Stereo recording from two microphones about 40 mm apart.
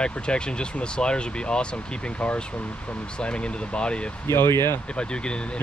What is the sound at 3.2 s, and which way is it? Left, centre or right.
Speech, left.